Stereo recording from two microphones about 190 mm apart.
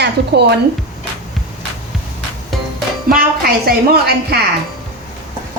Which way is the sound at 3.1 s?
50° right (ahead or behind).